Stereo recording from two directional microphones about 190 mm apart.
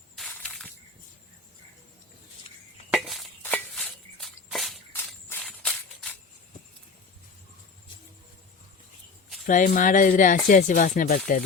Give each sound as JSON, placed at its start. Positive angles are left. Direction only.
{"t": 0.2, "sound": "snake", "side_deg": 5}
{"t": 2.9, "sound": "a sound", "side_deg": 0}
{"t": 9.5, "sound": "speech", "side_deg": 45}